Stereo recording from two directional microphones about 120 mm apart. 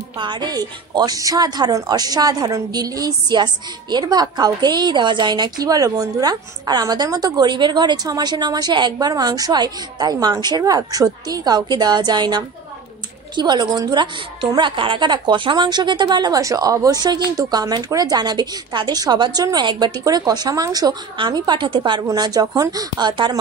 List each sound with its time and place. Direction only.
0.2 s a woman's voice: 35° right (ahead or behind)